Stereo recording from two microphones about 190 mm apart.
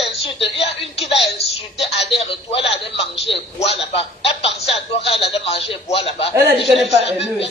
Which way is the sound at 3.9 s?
30° left (ahead or behind).